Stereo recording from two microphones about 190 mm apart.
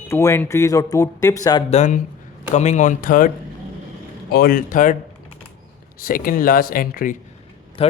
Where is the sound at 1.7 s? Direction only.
40° left (ahead or behind).